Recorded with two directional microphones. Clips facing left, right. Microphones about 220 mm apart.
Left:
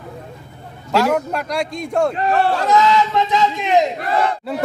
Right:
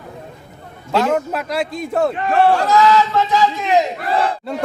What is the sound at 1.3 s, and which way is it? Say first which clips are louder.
Speech: right 1 dB; 5° right (ahead or behind).